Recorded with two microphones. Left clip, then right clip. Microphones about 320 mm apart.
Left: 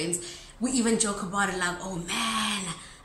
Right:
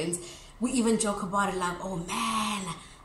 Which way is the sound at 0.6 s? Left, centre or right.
Centre.